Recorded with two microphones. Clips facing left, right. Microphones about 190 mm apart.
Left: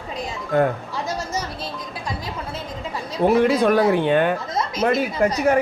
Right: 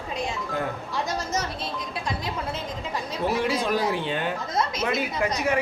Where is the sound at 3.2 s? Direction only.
55° left (ahead or behind).